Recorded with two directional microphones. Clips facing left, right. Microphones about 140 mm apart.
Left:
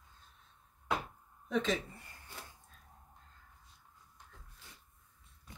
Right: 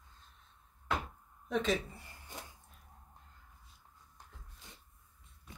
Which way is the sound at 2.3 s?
20° right (ahead or behind).